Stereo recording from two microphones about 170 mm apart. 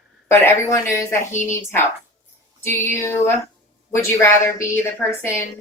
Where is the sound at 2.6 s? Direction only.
10° left (ahead or behind).